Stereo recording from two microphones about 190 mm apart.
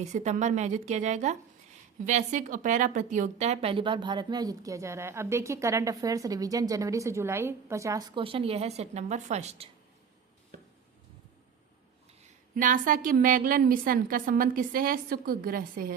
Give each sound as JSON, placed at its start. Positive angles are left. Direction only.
{"t": 0.0, "sound": "a woman's voice", "side_deg": -35}
{"t": 12.2, "sound": "a woman's voice", "side_deg": -45}